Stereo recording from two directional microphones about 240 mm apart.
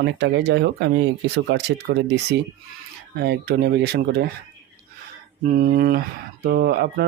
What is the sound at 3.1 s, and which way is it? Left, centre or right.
Speech, right.